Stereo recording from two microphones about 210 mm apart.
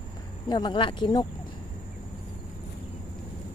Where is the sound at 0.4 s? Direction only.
20° left (ahead or behind).